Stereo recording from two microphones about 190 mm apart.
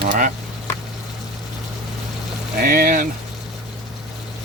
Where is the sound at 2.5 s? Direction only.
55° right (ahead or behind).